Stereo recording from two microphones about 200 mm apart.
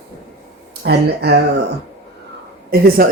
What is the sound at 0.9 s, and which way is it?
Speech, 55° right (ahead or behind).